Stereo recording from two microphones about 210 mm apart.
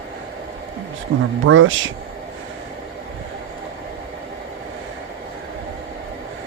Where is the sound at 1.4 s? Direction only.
70° right (ahead or behind).